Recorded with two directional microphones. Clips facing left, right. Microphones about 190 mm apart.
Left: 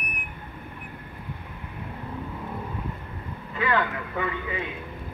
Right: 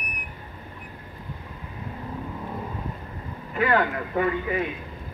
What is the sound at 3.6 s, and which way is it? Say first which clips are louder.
Vehicle: right 3 dB; 40° right (ahead or behind).